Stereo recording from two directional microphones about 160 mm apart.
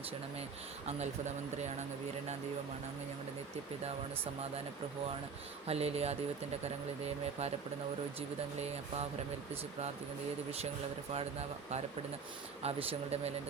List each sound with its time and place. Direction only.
0.9 s speech: 45° right (ahead or behind)
5.6 s speech: 40° right (ahead or behind)
8.5 s speech: 40° right (ahead or behind)
11.1 s speech: 40° right (ahead or behind)